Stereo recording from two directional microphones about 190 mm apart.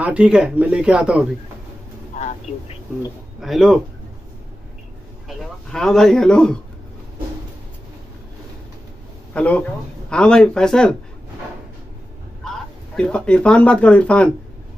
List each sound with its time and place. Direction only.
0.0 s speech: 5° right (ahead or behind)
2.1 s vehicle: 40° left (ahead or behind)
3.3 s speech: centre (ahead or behind)
5.3 s speech: centre (ahead or behind)
9.3 s speech: 5° left (ahead or behind)
12.4 s speech: 5° left (ahead or behind)